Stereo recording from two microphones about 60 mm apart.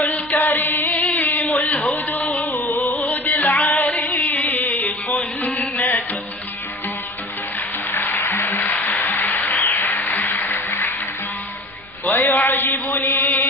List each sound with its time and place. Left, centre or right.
0.0 s chant: left
1.8 s music: left
7.9 s music: left
9.3 s a sound: left
9.6 s applause: left
12.1 s mantra: left